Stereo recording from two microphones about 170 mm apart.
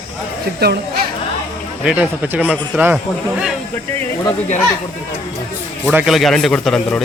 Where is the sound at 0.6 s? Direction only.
75° right (ahead or behind).